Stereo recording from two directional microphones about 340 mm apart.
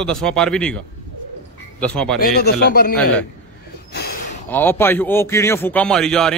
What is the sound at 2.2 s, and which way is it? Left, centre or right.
Speech, left.